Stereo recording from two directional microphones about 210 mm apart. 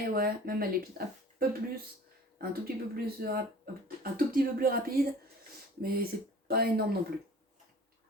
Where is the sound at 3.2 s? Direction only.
45° right (ahead or behind).